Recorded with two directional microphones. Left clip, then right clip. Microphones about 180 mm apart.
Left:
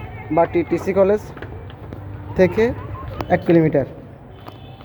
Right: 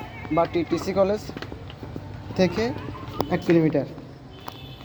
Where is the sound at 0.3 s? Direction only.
15° left (ahead or behind).